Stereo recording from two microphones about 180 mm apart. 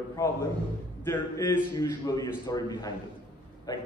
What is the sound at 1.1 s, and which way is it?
A man's voice, 15° left (ahead or behind).